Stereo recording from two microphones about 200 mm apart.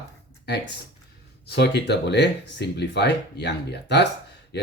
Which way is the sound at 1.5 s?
55° left (ahead or behind).